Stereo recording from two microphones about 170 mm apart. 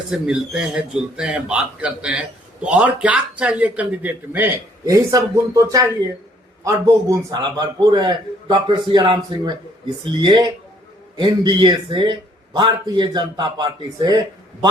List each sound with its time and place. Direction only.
0.1 s a man's voice: 5° right (ahead or behind); by 14.2 s 25° right (ahead or behind)